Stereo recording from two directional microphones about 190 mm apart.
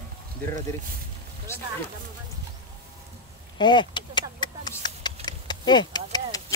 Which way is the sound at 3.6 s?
25° left (ahead or behind).